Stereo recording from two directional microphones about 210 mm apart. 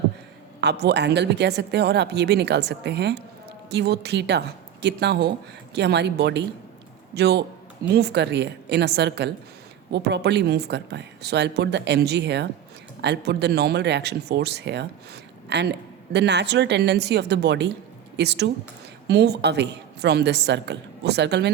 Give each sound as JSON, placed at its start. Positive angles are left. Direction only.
{"t": 0.6, "sound": "speech", "side_deg": -55}